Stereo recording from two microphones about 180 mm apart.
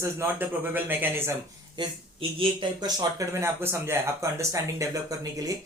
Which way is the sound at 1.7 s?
30° right (ahead or behind).